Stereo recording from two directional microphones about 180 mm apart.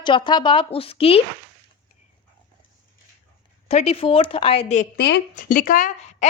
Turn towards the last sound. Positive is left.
turn(degrees=45)  # may be behind; listen again after turning